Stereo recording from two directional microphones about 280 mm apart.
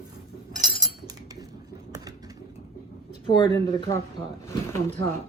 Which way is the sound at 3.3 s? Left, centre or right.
Centre.